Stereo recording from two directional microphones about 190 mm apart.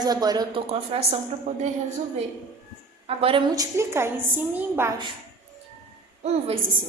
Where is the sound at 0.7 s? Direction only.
30° right (ahead or behind).